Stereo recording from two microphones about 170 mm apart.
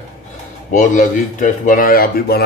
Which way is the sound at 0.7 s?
50° left (ahead or behind).